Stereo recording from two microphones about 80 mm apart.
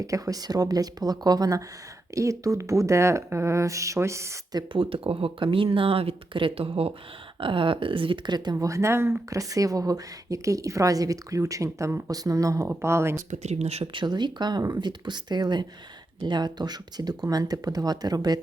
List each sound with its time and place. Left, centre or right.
0.0 s speech: right
4.5 s speech: right
8.5 s speech: right
12.6 s speech: right
13.8 s speech: right